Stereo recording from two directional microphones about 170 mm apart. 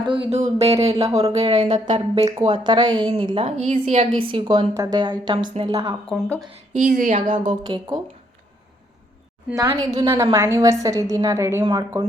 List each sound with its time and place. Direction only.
0.1 s a sound: 35° right (ahead or behind)
2.4 s a woman's voice: 30° right (ahead or behind)
4.2 s a sound: 30° right (ahead or behind)
4.7 s a woman's voice: 20° right (ahead or behind)
6.1 s a woman's voice: centre (ahead or behind)
6.7 s speech: 50° right (ahead or behind)
7.3 s a woman's voice: 30° right (ahead or behind)
9.6 s a woman's voice: 20° right (ahead or behind)